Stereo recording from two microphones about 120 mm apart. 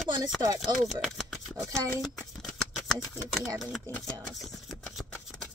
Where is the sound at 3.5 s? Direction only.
Centre (ahead or behind).